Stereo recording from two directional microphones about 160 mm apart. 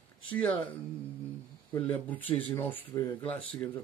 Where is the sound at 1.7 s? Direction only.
10° left (ahead or behind).